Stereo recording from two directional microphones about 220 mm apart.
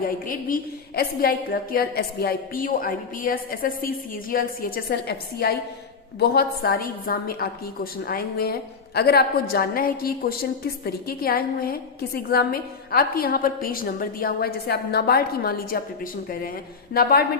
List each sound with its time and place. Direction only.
0.3 s a woman's voice: 40° left (ahead or behind)
16.9 s a woman's voice: 40° left (ahead or behind)